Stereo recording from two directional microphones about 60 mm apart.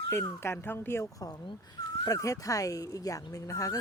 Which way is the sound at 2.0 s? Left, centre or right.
Left.